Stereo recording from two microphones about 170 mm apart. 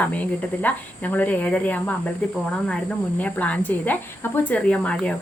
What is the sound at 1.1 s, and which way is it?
Speech, 10° left (ahead or behind).